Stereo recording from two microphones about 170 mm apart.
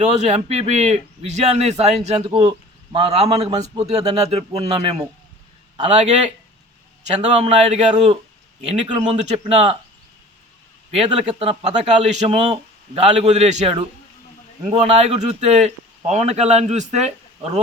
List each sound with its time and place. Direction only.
0.0 s speech: 40° right (ahead or behind)
10.9 s speech: 35° right (ahead or behind)